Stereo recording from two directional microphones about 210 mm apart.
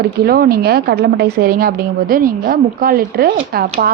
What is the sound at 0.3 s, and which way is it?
A woman's voice, 45° right (ahead or behind).